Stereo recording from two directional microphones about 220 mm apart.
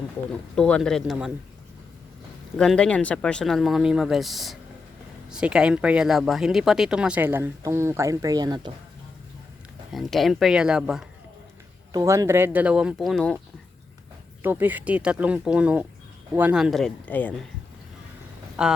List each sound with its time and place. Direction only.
0.5 s speech: 5° left (ahead or behind)
2.6 s speech: 5° left (ahead or behind); by 8.7 s 20° right (ahead or behind)
9.9 s speech: centre (ahead or behind)
11.9 s speech: 15° right (ahead or behind); by 13.4 s centre (ahead or behind)
14.4 s speech: 10° right (ahead or behind); by 17.3 s 5° left (ahead or behind)
18.6 s speech: 5° right (ahead or behind)